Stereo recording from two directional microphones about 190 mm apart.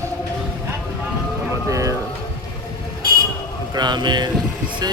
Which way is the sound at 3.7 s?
20° right (ahead or behind).